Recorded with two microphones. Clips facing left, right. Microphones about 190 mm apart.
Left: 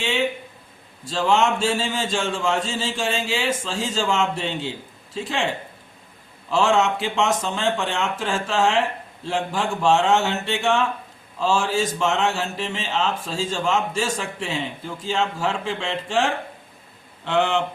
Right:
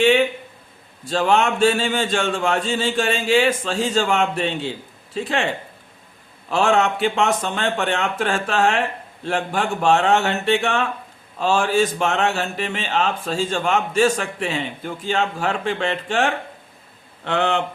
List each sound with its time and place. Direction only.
1.0 s speech: 60° right (ahead or behind)
6.5 s speech: 60° right (ahead or behind)